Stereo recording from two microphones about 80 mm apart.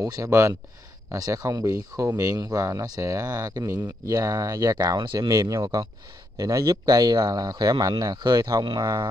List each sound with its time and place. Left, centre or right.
0.0 s speech: right
0.3 s speech: right
1.1 s speech: right
3.6 s speech: right
5.3 s speech: right